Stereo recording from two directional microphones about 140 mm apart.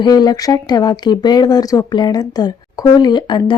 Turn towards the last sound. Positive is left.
turn(degrees=35)  # may be behind; listen again after turning